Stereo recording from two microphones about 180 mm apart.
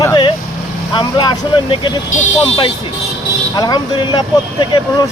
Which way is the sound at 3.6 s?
20° left (ahead or behind).